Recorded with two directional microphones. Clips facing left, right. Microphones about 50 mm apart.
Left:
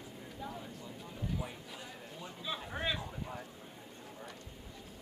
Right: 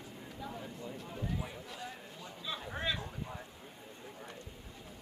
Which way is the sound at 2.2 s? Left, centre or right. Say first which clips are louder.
Left 1 dB; centre.